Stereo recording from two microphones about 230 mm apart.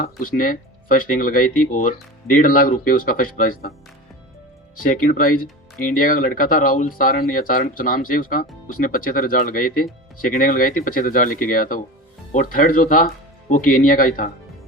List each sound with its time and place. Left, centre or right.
0.0 s speech: left
4.8 s speech: left